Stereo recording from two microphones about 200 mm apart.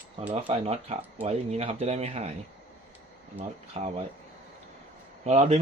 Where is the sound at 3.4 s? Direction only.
30° right (ahead or behind).